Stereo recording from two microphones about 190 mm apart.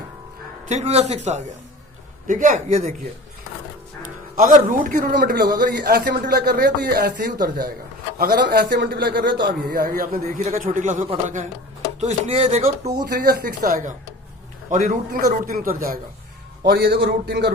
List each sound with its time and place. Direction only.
0.7 s speech: 35° right (ahead or behind)
4.0 s music: 45° right (ahead or behind)
4.9 s speech: 55° right (ahead or behind)
7.2 s a man's voice: 45° right (ahead or behind)
13.1 s a man's voice: 55° right (ahead or behind)